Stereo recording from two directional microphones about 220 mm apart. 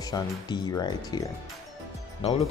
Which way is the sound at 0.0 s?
15° left (ahead or behind).